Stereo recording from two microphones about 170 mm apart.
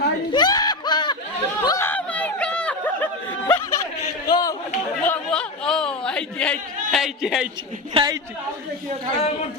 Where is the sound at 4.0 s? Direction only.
20° left (ahead or behind).